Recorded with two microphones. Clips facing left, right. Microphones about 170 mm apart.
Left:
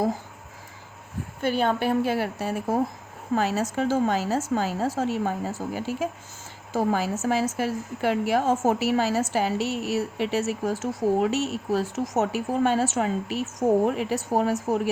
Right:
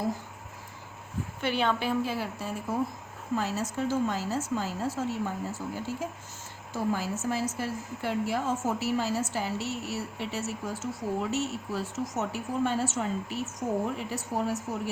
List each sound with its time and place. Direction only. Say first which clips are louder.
1.4 s a woman's voice: left 5 dB; 45° left (ahead or behind); by 14.8 s 85° left